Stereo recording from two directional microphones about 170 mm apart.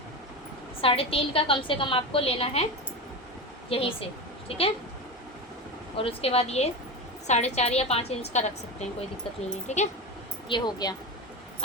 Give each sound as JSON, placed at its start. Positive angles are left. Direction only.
{"t": 0.8, "sound": "a woman's voice", "side_deg": 35}
{"t": 3.7, "sound": "a woman's voice", "side_deg": 35}
{"t": 6.0, "sound": "a woman's voice", "side_deg": 35}
{"t": 9.7, "sound": "speech", "side_deg": 40}
{"t": 10.5, "sound": "speech", "side_deg": 25}